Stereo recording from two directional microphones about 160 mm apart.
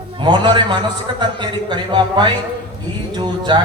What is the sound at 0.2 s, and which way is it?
A man's voice, 30° right (ahead or behind).